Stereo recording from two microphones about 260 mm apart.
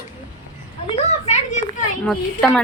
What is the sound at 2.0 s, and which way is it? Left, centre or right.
Speech, centre.